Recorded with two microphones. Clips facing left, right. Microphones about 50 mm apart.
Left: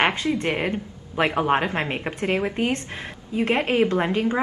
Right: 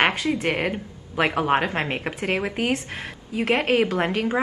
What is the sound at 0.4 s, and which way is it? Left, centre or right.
Speech, centre.